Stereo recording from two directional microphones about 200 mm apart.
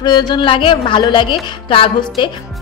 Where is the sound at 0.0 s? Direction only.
20° left (ahead or behind).